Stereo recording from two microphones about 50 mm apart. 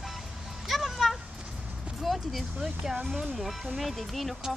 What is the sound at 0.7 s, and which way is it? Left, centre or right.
Music, centre.